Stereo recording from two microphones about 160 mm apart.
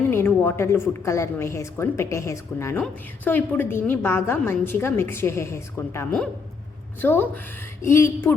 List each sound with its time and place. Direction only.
0.1 s a woman's voice: 15° left (ahead or behind)